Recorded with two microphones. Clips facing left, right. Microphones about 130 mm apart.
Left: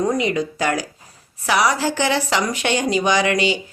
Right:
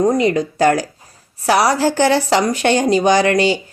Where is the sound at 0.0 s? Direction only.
40° right (ahead or behind).